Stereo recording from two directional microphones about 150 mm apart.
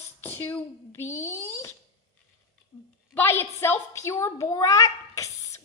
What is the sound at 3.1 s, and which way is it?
A child's voice, 15° left (ahead or behind).